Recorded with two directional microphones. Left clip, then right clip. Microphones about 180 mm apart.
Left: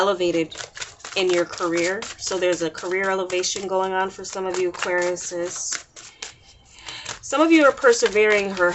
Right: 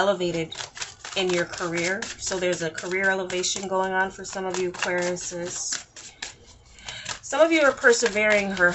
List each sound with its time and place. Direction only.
0.0 s speech: 40° left (ahead or behind)
1.5 s speech: 30° left (ahead or behind)
7.3 s speech: 40° left (ahead or behind)